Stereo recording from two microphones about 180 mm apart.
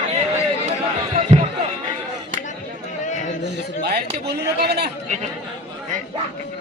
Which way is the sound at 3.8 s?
65° right (ahead or behind).